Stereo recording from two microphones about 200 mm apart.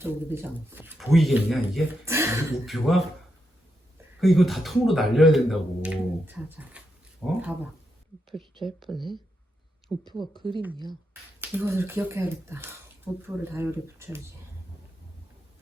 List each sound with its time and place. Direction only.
0.0 s speech: 10° right (ahead or behind)
0.9 s speech: centre (ahead or behind)
2.0 s speech: 10° right (ahead or behind)
2.6 s speech: centre (ahead or behind)
4.2 s speech: centre (ahead or behind)
9.0 s speech: 25° right (ahead or behind)
9.9 s speech: centre (ahead or behind)
11.3 s speech: 10° right (ahead or behind)